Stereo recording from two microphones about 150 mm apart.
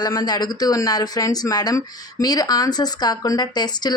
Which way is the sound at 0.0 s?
25° left (ahead or behind).